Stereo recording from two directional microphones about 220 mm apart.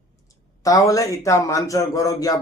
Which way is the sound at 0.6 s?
15° left (ahead or behind).